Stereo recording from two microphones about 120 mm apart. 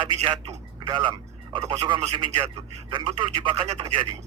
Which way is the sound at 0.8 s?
40° right (ahead or behind).